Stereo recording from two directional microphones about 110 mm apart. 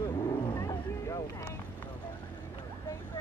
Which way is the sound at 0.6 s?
30° left (ahead or behind).